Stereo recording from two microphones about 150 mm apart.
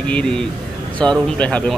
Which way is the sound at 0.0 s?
5° left (ahead or behind).